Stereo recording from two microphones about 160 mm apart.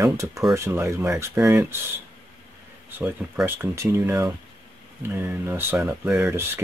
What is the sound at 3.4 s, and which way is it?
Speech, 15° right (ahead or behind).